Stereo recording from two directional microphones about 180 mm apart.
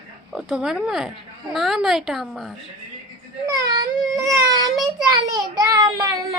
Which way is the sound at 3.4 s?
20° right (ahead or behind).